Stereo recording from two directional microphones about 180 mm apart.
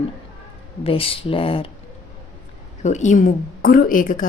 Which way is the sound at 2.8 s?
40° left (ahead or behind).